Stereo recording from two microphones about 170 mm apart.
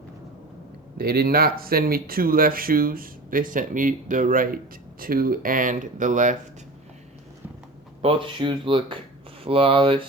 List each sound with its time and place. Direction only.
0.9 s speech: 65° right (ahead or behind); by 6.3 s 50° right (ahead or behind)
8.0 s speech: 30° right (ahead or behind)